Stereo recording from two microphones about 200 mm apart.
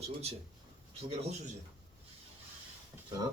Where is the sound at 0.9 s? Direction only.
30° right (ahead or behind).